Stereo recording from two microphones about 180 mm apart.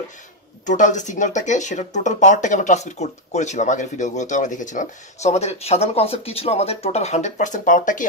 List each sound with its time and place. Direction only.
0.7 s speech: 45° left (ahead or behind)